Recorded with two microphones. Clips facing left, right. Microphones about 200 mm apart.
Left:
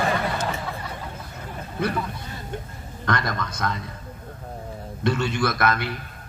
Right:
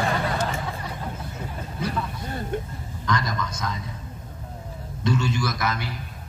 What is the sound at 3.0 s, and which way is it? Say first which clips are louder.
Speech: left 1 dB; 60° left (ahead or behind).